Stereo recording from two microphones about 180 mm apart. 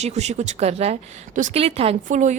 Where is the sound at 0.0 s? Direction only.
40° right (ahead or behind).